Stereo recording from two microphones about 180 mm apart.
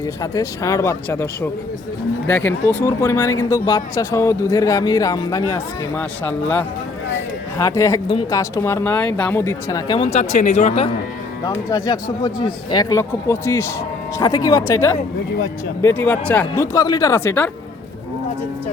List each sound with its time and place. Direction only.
0.0 s speech: 20° left (ahead or behind); by 10.8 s 40° left (ahead or behind)
11.4 s speech: 20° left (ahead or behind)